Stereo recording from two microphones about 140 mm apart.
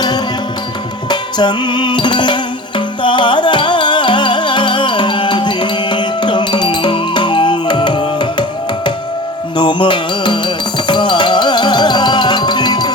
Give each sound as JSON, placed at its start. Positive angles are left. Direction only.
{"t": 1.1, "sound": "music", "side_deg": 30}